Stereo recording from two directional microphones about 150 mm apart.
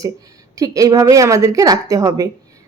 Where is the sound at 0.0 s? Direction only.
25° right (ahead or behind).